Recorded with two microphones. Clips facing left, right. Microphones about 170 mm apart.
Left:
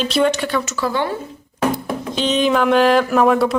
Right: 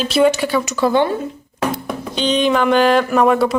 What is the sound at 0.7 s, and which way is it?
Speech, 20° right (ahead or behind).